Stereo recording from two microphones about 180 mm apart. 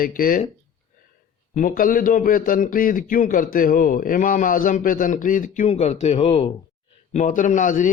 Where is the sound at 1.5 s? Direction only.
50° left (ahead or behind).